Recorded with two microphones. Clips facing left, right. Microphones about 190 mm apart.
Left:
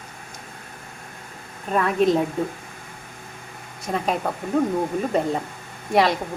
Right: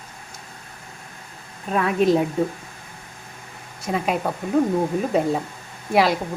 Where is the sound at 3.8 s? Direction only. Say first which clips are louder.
Right 1 dB; 5° right (ahead or behind).